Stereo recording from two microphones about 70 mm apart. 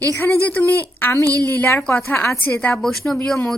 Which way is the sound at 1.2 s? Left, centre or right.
Right.